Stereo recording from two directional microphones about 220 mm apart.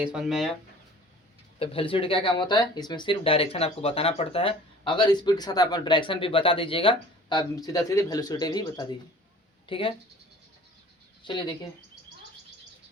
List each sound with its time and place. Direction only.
0.0 s speech: 5° right (ahead or behind)
1.5 s speech: 25° left (ahead or behind)
11.2 s speech: 20° left (ahead or behind)